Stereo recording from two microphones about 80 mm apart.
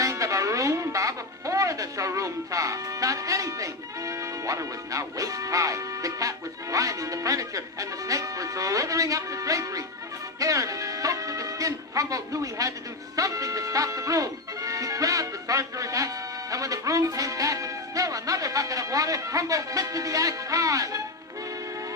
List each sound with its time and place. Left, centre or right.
0.0 s speech: right